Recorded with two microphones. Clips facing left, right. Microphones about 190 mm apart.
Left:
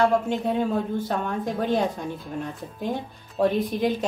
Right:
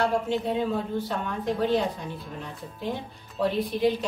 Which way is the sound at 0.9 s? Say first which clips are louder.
Left 3 dB; 50° left (ahead or behind).